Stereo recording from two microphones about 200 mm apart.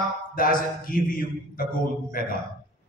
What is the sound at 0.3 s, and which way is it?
A man's voice, 45° left (ahead or behind).